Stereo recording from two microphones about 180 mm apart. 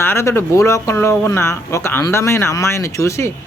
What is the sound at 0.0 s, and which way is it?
Speech, 15° left (ahead or behind).